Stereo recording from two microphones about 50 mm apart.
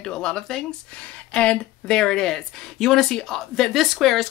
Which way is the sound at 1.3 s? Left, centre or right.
Left.